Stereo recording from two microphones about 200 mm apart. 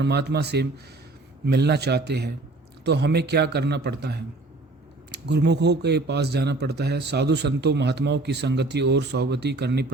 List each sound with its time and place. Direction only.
0.0 s speech: 55° right (ahead or behind)